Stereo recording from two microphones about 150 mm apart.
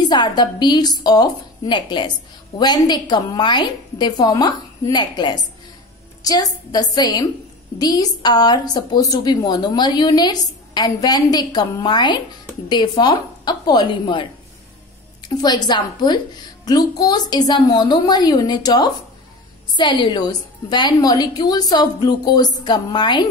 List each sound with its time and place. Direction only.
0.1 s a woman's voice: 30° left (ahead or behind)
15.2 s a woman's voice: 30° left (ahead or behind)